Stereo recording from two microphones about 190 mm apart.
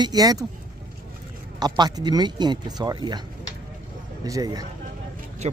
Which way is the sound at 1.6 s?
20° right (ahead or behind).